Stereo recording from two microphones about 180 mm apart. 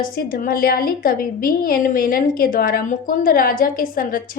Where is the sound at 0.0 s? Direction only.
50° left (ahead or behind).